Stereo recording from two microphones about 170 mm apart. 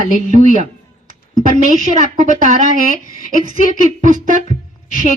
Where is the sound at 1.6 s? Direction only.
45° right (ahead or behind).